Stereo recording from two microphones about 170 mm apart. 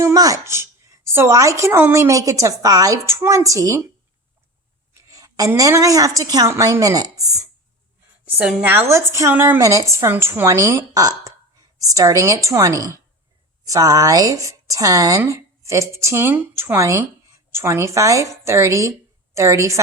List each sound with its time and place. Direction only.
0.0 s speech: 20° right (ahead or behind)
5.0 s speech: 20° right (ahead or behind)
8.4 s a woman's voice: 10° right (ahead or behind)